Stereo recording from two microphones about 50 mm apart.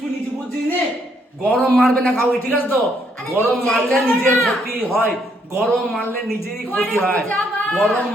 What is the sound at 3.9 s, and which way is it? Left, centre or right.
A woman's voice, left.